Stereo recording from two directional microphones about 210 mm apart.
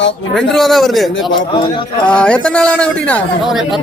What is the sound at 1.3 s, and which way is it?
Speech, 20° left (ahead or behind).